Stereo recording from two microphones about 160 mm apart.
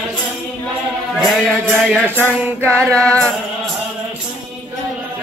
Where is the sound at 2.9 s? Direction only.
5° left (ahead or behind).